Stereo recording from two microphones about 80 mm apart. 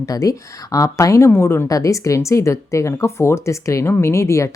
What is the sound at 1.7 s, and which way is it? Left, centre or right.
Speech, left.